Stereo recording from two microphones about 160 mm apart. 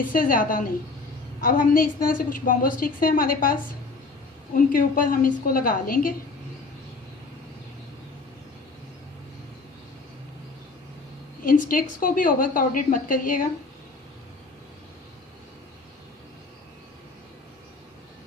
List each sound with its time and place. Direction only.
0.1 s a woman's voice: 60° left (ahead or behind)
11.4 s a woman's voice: 60° left (ahead or behind)